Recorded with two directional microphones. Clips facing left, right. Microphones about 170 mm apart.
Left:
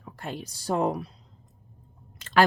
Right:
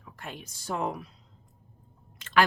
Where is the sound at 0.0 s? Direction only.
35° left (ahead or behind).